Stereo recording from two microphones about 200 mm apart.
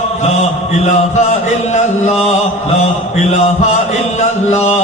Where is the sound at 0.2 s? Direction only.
35° left (ahead or behind).